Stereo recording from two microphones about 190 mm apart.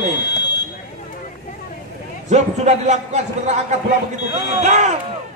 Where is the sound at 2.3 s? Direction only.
35° right (ahead or behind).